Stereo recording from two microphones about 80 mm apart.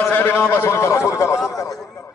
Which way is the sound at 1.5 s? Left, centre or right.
Left.